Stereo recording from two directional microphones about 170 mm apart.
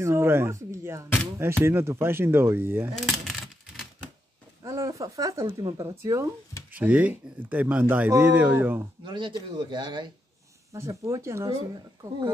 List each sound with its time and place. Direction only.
0.0 s speech: 15° right (ahead or behind)
3.0 s a sound: centre (ahead or behind)
4.6 s speech: 20° right (ahead or behind)
6.7 s speech: 10° right (ahead or behind)
9.0 s speech: 30° right (ahead or behind)